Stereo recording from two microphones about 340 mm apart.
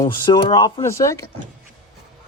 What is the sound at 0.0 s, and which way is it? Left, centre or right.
Speech, centre.